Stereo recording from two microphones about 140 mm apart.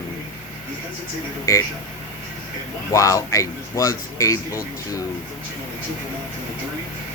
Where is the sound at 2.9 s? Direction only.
20° left (ahead or behind).